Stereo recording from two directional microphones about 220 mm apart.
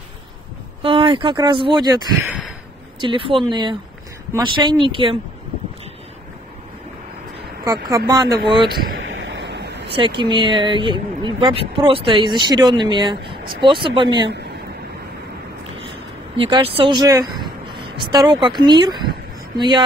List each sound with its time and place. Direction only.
0.8 s speech: 25° right (ahead or behind)
2.2 s a sound: centre (ahead or behind)
3.0 s speech: 25° right (ahead or behind)
7.6 s speech: 15° right (ahead or behind)
8.9 s a sound: 60° right (ahead or behind)
9.8 s speech: 25° right (ahead or behind)
16.3 s speech: 25° right (ahead or behind)